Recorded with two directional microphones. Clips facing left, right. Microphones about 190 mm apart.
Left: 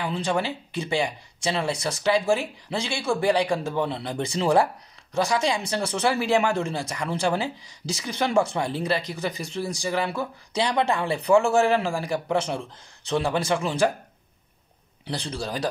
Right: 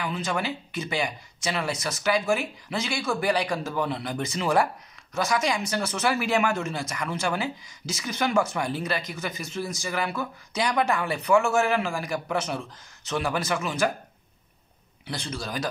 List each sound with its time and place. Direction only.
0.0 s speech: 30° left (ahead or behind)
15.0 s speech: 35° left (ahead or behind)